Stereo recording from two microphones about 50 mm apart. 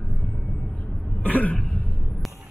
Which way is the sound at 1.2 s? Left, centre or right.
Left.